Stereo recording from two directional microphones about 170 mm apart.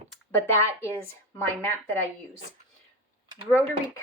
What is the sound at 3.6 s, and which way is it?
Speech, 15° left (ahead or behind).